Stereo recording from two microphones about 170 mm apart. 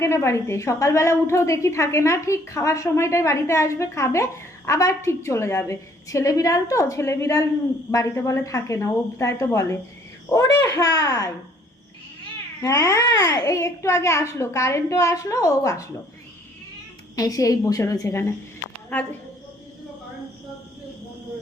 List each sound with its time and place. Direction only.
0.0 s a woman's voice: 15° left (ahead or behind)
12.6 s a child's voice: 20° left (ahead or behind)
17.2 s a child's voice: 20° left (ahead or behind)